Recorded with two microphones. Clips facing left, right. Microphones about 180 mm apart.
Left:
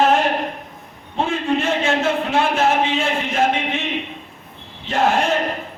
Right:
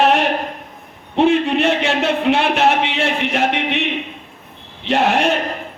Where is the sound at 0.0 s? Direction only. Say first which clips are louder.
Right 1 dB; 70° right (ahead or behind).